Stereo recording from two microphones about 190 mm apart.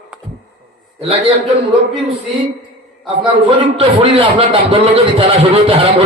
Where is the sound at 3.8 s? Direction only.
30° right (ahead or behind).